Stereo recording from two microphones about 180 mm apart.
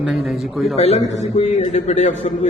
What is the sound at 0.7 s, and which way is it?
A man's voice, 35° left (ahead or behind).